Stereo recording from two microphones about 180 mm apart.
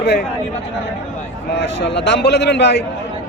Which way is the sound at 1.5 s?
70° left (ahead or behind).